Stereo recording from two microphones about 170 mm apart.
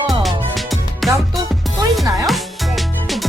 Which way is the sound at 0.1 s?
Centre (ahead or behind).